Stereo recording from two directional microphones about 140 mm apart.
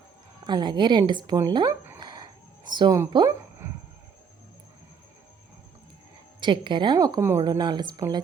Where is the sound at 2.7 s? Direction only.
30° right (ahead or behind).